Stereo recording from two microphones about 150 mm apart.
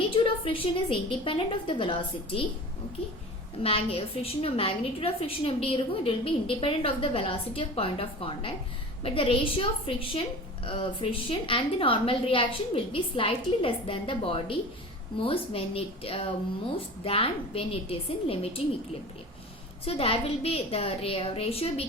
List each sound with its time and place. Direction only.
0.1 s a woman's voice: 35° left (ahead or behind)
3.6 s a woman's voice: 40° left (ahead or behind)
19.8 s a woman's voice: 40° left (ahead or behind)